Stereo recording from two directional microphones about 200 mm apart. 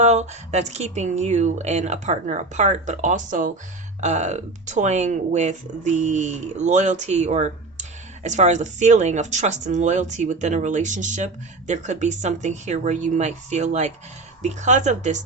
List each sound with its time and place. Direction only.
0.0 s speech: 35° right (ahead or behind)